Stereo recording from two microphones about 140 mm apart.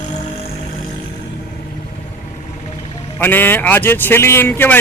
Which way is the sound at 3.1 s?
15° left (ahead or behind).